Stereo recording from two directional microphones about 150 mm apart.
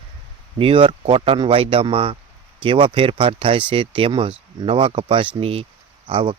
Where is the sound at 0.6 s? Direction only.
35° right (ahead or behind).